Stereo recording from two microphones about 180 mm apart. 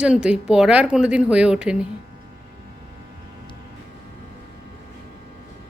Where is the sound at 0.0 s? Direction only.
5° right (ahead or behind).